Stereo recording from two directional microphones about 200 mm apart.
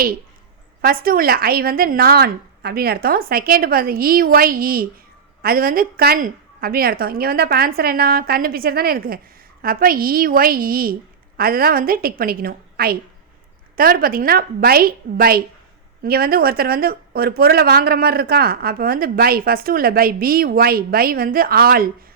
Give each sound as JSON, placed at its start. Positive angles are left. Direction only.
{"t": 0.8, "sound": "speech", "side_deg": -45}